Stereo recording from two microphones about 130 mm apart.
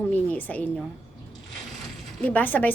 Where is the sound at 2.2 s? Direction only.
15° left (ahead or behind).